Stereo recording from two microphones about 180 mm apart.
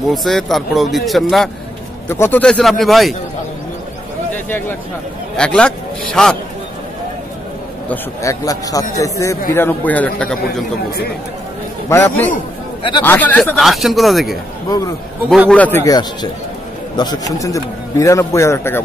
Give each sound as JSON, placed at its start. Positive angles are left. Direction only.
{"t": 0.1, "sound": "speech", "side_deg": 0}
{"t": 2.0, "sound": "speech", "side_deg": 10}
{"t": 4.5, "sound": "a man's voice", "side_deg": 10}
{"t": 7.9, "sound": "a man's voice", "side_deg": 15}
{"t": 11.9, "sound": "a man's voice", "side_deg": 15}
{"t": 15.5, "sound": "a man's voice", "side_deg": 10}